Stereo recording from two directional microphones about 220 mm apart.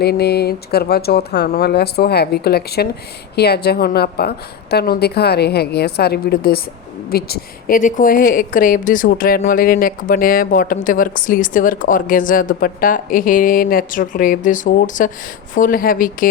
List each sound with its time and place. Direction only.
0.0 s a woman's voice: 45° left (ahead or behind)